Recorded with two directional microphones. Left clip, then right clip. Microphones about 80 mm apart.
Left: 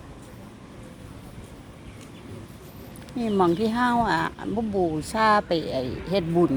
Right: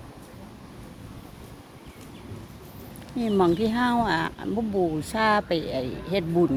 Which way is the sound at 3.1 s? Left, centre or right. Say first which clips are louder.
Even; centre.